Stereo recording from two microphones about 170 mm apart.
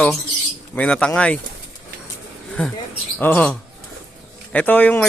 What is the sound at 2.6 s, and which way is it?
Speech, 5° left (ahead or behind).